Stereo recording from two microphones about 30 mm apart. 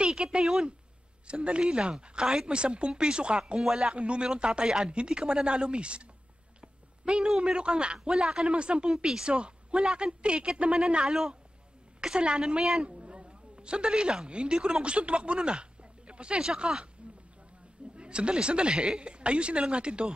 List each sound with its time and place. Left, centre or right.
0.0 s a sound: right
1.2 s speech: right
3.6 s speech: centre
3.9 s speech: right
6.6 s a sound: right
7.2 s speech: centre
7.5 s speech: right
8.5 s speech: right
8.9 s speech: right
11.1 s a woman's voice: centre
12.0 s speech: right
12.8 s a sound: right
13.9 s speech: right
17.9 s speech: right